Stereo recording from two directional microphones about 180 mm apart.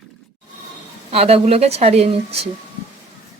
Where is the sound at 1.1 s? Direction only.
35° right (ahead or behind).